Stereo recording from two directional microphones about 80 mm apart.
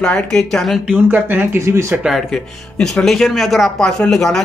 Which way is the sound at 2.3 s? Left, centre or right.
Centre.